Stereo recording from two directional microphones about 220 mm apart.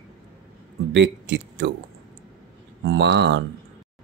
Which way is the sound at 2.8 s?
55° right (ahead or behind).